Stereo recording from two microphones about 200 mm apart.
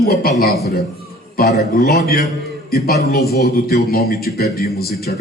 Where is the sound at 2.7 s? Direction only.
50° left (ahead or behind).